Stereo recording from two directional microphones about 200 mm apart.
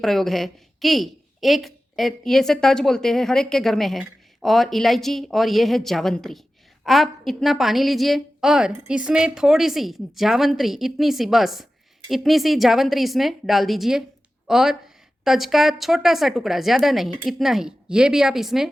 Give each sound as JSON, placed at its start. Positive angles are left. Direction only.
{"t": 0.0, "sound": "a woman's voice", "side_deg": 0}